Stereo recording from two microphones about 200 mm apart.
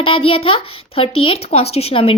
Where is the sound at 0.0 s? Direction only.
25° left (ahead or behind).